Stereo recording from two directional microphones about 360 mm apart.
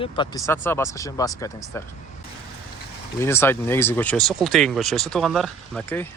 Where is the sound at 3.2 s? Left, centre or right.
Centre.